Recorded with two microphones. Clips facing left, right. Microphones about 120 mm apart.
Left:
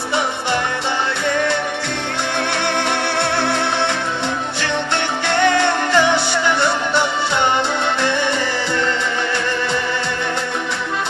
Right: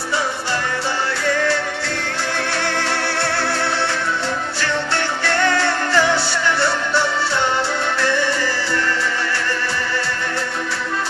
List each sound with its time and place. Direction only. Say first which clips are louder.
5.2 s music: left 3 dB; 20° left (ahead or behind)